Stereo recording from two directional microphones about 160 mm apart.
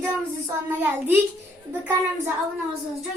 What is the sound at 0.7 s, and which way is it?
Speech, 10° right (ahead or behind).